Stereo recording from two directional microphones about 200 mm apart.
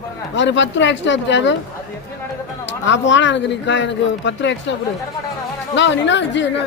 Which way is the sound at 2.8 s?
65° left (ahead or behind).